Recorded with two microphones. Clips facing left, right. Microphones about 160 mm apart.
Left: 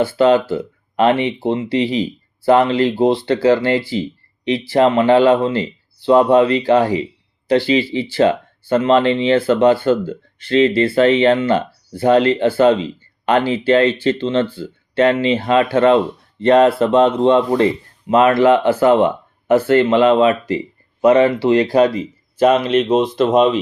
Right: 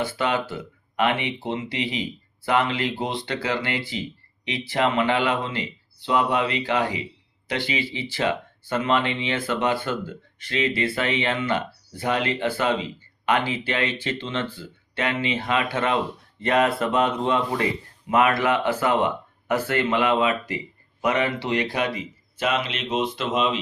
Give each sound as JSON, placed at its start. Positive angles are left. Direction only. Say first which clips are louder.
{"t": 0.0, "sound": "speech", "louder": "left 12 dB", "side_deg": 35}